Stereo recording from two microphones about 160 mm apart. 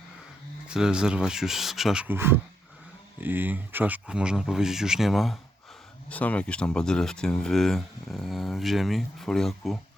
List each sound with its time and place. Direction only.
0.7 s speech: 5° right (ahead or behind)